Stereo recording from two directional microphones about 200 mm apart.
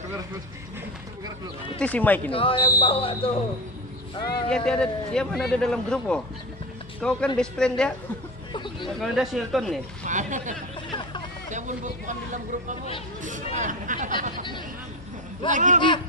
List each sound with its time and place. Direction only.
1.8 s speech: 5° left (ahead or behind)
2.3 s speech: 25° left (ahead or behind)
4.5 s speech: 5° left (ahead or behind)
10.0 s a sound: 40° right (ahead or behind)
11.5 s speech: 40° right (ahead or behind)
15.5 s speech: 40° right (ahead or behind)